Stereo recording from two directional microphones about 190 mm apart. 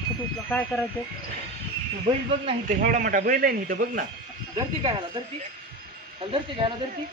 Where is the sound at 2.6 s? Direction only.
45° right (ahead or behind).